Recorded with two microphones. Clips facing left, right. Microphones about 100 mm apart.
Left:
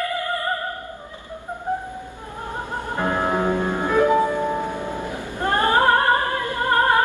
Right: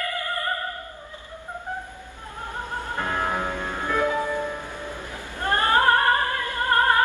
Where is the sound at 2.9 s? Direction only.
15° left (ahead or behind).